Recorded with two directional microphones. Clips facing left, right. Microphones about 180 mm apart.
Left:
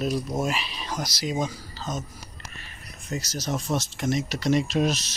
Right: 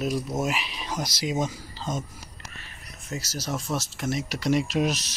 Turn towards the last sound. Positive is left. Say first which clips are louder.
# left 1 dB
turn(degrees=-10)  # may be behind; listen again after turning